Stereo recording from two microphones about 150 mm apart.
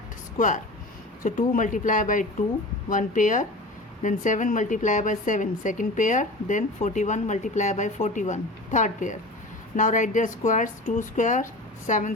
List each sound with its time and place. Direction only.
0.3 s a woman's voice: 60° left (ahead or behind)